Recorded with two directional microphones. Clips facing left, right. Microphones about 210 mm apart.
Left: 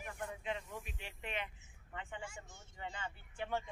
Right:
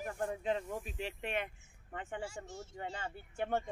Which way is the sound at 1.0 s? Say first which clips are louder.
Right 10 dB; 90° right.